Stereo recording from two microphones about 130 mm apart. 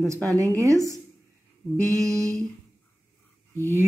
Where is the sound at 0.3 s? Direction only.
25° right (ahead or behind).